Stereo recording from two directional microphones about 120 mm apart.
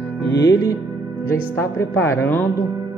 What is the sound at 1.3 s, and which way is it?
Speech, 20° left (ahead or behind).